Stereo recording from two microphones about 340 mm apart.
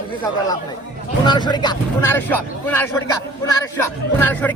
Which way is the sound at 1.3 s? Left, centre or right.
Centre.